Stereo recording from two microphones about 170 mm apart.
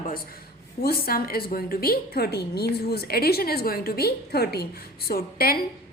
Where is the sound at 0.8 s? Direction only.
60° left (ahead or behind).